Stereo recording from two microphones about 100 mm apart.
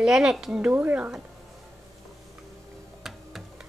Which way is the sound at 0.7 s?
15° right (ahead or behind).